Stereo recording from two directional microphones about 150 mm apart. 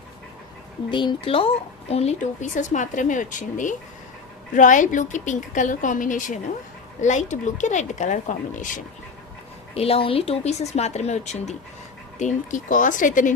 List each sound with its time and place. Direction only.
0.9 s speech: 35° left (ahead or behind); by 8.8 s 60° left (ahead or behind)
9.7 s speech: 40° left (ahead or behind); by 13.3 s 60° left (ahead or behind)